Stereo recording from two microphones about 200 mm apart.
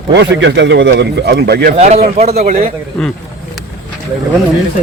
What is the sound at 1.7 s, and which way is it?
Speech, 35° right (ahead or behind).